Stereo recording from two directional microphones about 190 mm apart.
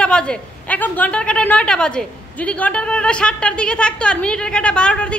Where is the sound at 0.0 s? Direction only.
5° left (ahead or behind).